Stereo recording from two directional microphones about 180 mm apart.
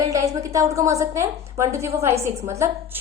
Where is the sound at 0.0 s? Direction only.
20° right (ahead or behind).